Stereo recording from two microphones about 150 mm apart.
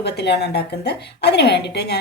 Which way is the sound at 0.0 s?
90° left.